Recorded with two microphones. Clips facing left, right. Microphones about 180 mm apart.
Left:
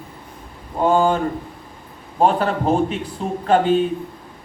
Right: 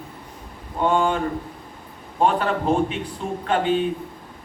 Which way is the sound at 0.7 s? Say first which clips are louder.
Left 4 dB; 40° left (ahead or behind).